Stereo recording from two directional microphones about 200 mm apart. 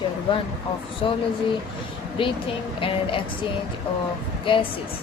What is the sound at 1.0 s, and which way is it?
Speech, 25° left (ahead or behind).